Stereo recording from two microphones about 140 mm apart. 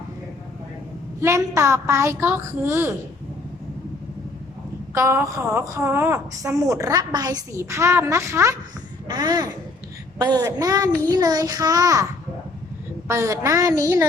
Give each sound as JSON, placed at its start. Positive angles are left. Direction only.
{"t": 1.2, "sound": "a woman's voice", "side_deg": -20}
{"t": 4.9, "sound": "a woman's voice", "side_deg": -20}
{"t": 13.1, "sound": "a woman's voice", "side_deg": -20}